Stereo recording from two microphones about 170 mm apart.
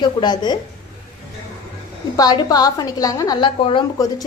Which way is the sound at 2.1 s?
20° left (ahead or behind).